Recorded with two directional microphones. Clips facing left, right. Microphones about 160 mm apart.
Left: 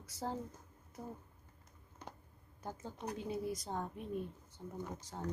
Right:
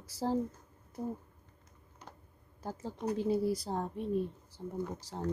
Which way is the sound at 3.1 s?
30° right (ahead or behind).